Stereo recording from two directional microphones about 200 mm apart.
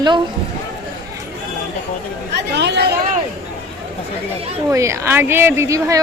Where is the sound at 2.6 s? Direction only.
55° right (ahead or behind).